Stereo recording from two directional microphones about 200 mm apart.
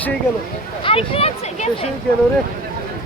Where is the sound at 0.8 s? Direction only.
25° left (ahead or behind).